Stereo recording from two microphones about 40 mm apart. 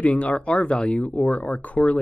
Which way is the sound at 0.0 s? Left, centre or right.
Left.